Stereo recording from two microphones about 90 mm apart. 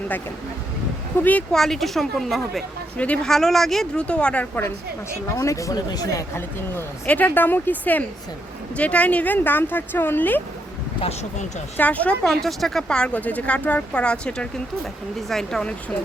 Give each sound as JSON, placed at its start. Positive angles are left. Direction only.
{"t": 1.2, "sound": "speech", "side_deg": 20}
{"t": 1.5, "sound": "a woman's voice", "side_deg": 5}
{"t": 5.4, "sound": "speech", "side_deg": 35}
{"t": 6.3, "sound": "speech", "side_deg": 30}
{"t": 11.8, "sound": "speech", "side_deg": 15}
{"t": 12.2, "sound": "a woman's voice", "side_deg": 5}